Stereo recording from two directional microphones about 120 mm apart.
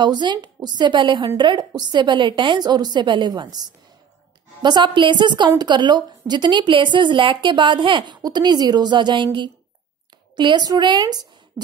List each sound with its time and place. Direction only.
0.0 s a woman's voice: 40° right (ahead or behind)